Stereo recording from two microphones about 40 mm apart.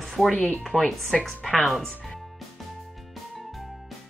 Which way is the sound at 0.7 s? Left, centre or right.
Right.